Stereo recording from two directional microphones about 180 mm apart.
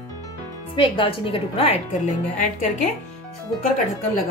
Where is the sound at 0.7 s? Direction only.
30° left (ahead or behind).